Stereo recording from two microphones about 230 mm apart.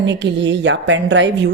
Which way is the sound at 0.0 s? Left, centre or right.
Right.